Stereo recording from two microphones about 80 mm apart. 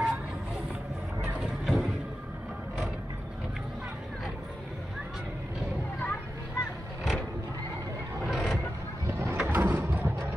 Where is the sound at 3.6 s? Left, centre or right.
Centre.